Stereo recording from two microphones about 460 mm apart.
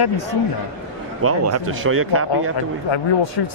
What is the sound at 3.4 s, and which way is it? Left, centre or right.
Speech, left.